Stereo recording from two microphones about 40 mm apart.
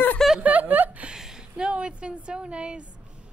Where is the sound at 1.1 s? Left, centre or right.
Centre.